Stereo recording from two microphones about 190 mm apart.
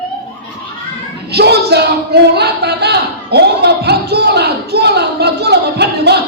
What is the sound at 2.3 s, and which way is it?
A man's voice, 60° right (ahead or behind).